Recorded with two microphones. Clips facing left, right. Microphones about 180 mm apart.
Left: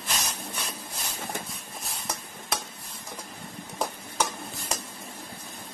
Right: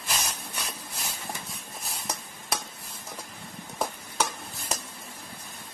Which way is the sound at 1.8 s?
Centre (ahead or behind).